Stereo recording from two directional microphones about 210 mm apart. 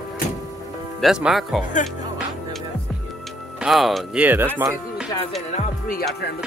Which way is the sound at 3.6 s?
Centre (ahead or behind).